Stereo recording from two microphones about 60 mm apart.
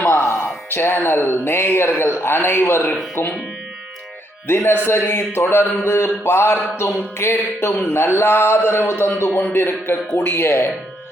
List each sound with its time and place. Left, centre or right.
0.0 s music: left
0.7 s speech: left
4.4 s a sound: left
10.2 s speech: left